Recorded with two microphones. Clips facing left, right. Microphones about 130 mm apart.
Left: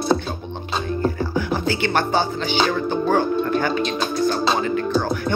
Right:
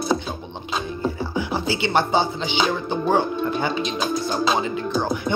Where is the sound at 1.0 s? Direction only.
10° right (ahead or behind).